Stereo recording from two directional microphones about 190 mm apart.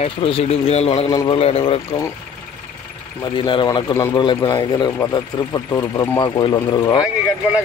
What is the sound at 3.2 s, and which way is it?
Speech, 25° left (ahead or behind).